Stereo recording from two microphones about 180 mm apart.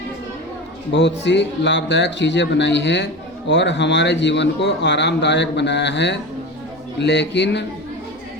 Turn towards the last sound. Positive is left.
turn(degrees=75)  # may be behind; listen again after turning